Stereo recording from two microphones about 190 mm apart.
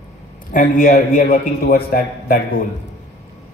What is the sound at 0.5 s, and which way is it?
A man's voice, 45° left (ahead or behind).